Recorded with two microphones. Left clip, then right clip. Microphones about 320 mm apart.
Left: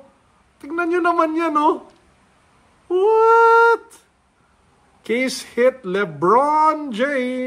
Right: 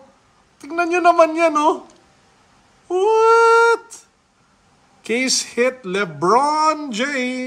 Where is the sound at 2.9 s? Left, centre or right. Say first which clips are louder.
Even; centre.